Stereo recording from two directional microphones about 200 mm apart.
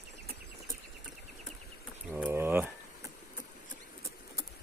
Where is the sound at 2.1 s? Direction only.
10° right (ahead or behind).